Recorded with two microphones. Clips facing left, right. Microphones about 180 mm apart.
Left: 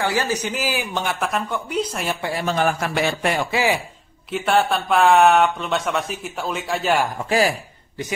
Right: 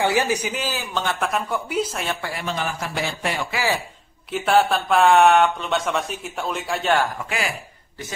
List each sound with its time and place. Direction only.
0.0 s a man's voice: 15° right (ahead or behind)
0.6 s a man's voice: 15° left (ahead or behind)
1.2 s speech: 5° right (ahead or behind)
2.4 s a man's voice: 55° left (ahead or behind)
3.5 s a man's voice: 15° left (ahead or behind)
4.3 s speech: centre (ahead or behind)
7.2 s speech: 35° left (ahead or behind)